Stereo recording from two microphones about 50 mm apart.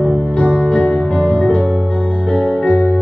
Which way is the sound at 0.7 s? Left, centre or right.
Left.